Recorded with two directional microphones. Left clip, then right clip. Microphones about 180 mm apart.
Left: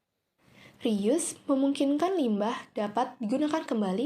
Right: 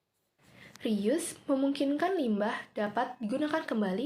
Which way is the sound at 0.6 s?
20° left (ahead or behind).